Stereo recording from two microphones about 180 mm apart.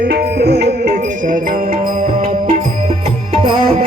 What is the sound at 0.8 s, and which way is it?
Music, 50° right (ahead or behind).